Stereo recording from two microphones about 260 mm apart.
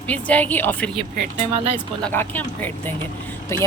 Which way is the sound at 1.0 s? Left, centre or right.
Right.